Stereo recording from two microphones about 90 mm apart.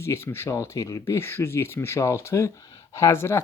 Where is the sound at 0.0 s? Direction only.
30° left (ahead or behind).